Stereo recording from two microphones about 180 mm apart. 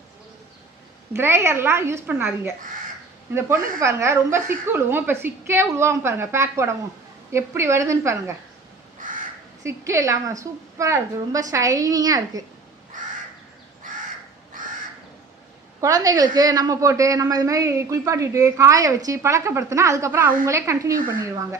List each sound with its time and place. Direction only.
1.1 s a woman's voice: 15° right (ahead or behind)
9.0 s crow: 45° right (ahead or behind)
9.6 s a woman's voice: 15° right (ahead or behind)
15.8 s a woman's voice: 20° right (ahead or behind)
20.9 s speech: 50° right (ahead or behind)
21.2 s a woman's voice: 15° right (ahead or behind)